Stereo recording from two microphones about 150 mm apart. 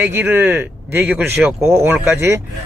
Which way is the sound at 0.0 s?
15° right (ahead or behind).